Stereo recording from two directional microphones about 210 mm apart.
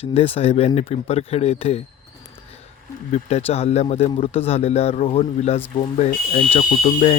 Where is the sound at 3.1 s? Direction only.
30° left (ahead or behind).